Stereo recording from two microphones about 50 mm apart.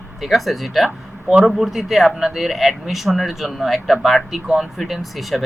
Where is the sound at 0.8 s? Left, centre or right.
Centre.